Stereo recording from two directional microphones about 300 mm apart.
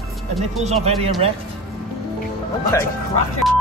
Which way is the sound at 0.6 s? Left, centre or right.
Right.